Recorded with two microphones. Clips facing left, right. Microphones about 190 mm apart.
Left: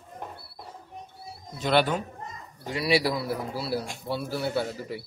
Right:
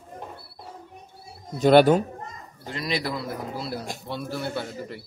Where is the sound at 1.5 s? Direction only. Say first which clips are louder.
Right 8 dB; 45° right (ahead or behind).